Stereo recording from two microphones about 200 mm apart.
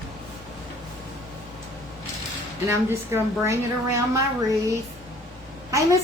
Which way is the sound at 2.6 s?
15° right (ahead or behind).